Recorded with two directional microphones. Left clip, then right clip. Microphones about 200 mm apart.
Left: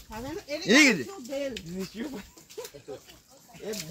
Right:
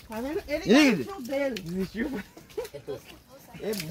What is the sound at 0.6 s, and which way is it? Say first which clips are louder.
Sheep: left 1 dB; 50° left (ahead or behind).